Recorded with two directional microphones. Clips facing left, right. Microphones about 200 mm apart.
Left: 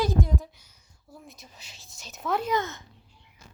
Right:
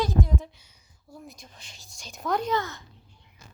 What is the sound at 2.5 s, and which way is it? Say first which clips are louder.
Speech: even; 20° left (ahead or behind).